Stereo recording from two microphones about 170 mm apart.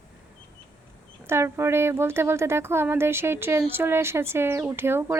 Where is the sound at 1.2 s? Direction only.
15° right (ahead or behind).